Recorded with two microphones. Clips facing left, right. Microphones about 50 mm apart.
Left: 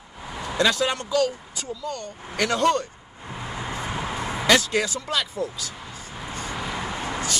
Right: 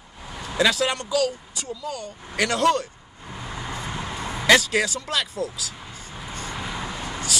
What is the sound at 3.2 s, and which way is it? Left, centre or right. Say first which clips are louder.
Vehicle: left 2 dB; centre.